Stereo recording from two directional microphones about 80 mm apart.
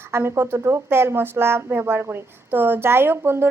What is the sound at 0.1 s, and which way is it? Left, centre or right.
Speech, right.